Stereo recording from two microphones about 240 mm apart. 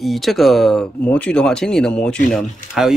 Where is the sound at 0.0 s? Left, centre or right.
Centre.